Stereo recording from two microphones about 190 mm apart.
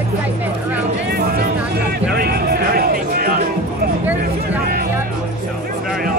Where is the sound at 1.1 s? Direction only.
55° right (ahead or behind).